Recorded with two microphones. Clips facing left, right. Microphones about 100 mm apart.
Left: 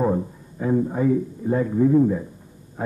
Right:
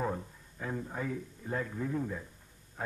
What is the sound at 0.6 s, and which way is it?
A man's voice, 20° left (ahead or behind).